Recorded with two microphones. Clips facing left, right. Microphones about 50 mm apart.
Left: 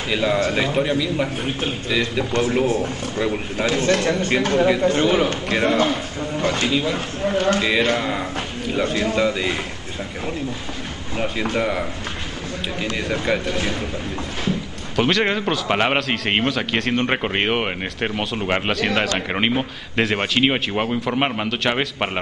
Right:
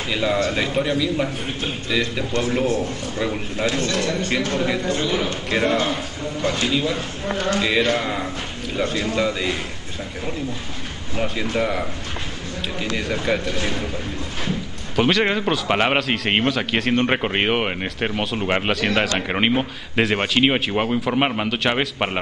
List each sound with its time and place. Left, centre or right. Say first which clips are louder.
0.1 s speech: left 1 dB; centre
2.4 s speech: left 1 dB; centre
3.2 s speech: left 2 dB; centre
3.7 s a man's voice: left 4 dB; left
5.5 s speech: right 2 dB; centre
6.4 s a man's voice: left 1 dB; centre
6.7 s speech: left 1 dB; centre
11.1 s speech: even; centre
12.8 s speech: even; centre
15.0 s speech: even; centre